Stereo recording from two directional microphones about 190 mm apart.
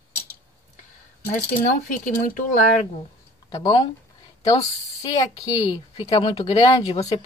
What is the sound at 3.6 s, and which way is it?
Speech, 20° left (ahead or behind).